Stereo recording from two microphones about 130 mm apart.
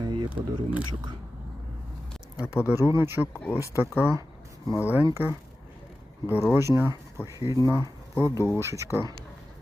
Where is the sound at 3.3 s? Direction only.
20° left (ahead or behind).